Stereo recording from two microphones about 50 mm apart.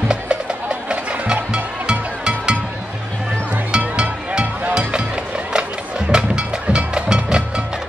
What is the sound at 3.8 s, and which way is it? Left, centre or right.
Music, right.